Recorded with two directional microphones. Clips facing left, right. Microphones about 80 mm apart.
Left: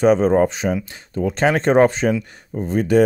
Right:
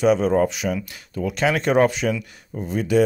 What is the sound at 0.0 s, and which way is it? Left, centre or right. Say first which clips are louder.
Speech: left 3 dB; left.